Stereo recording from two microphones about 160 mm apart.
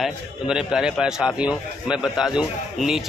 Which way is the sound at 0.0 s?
5° right (ahead or behind).